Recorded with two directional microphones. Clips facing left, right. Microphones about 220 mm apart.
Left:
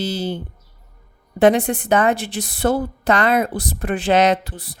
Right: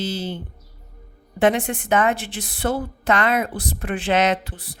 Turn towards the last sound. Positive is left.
turn(degrees=40)  # may be behind; listen again after turning